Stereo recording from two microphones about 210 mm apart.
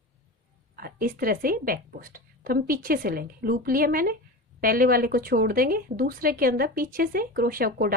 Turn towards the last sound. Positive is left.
turn(degrees=-45)  # may be behind; listen again after turning